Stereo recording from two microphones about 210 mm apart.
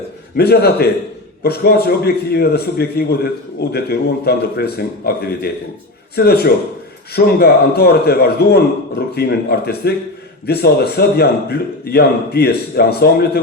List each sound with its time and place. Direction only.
0.3 s a man's voice: 50° left (ahead or behind)